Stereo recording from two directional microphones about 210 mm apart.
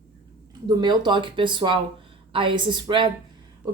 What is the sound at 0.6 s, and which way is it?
Speech, 20° right (ahead or behind).